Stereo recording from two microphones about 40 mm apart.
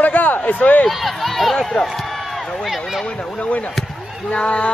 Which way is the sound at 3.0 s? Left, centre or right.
Left.